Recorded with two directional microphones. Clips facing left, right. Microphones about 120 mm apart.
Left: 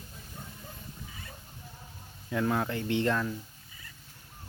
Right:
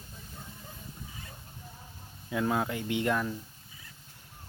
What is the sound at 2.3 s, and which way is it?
Speech, 15° right (ahead or behind).